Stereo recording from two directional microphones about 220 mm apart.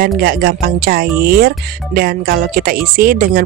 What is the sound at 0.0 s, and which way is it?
Speech, 40° right (ahead or behind).